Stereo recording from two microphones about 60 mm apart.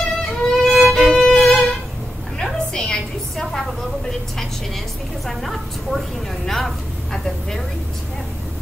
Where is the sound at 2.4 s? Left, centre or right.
Centre.